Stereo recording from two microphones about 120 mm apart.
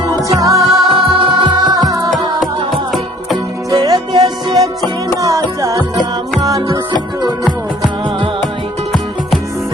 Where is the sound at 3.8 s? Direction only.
35° right (ahead or behind).